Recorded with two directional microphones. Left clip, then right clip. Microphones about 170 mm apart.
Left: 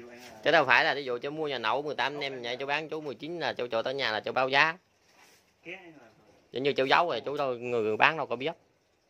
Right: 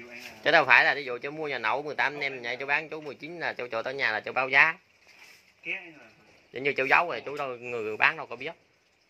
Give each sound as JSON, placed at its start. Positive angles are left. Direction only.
{"t": 0.4, "sound": "speech", "side_deg": 20}
{"t": 6.7, "sound": "speech", "side_deg": 35}
{"t": 7.2, "sound": "a man's voice", "side_deg": 65}